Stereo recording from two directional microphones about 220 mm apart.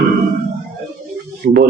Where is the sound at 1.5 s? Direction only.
35° right (ahead or behind).